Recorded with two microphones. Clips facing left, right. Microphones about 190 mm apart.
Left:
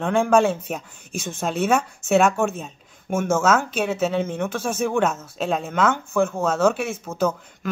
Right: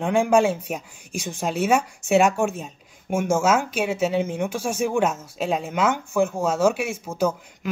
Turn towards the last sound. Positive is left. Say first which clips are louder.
# even
turn(degrees=-10)  # may be behind; listen again after turning